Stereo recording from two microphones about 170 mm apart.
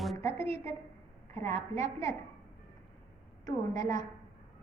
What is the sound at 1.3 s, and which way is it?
Speech, 15° left (ahead or behind).